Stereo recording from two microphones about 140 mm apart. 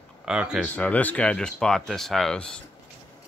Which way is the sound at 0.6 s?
10° left (ahead or behind).